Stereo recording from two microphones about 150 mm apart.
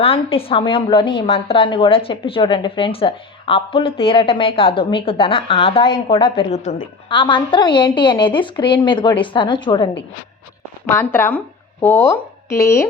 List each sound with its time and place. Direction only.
0.0 s a woman's voice: 40° left (ahead or behind)
7.1 s a woman's voice: 30° left (ahead or behind)
10.8 s speech: 15° left (ahead or behind)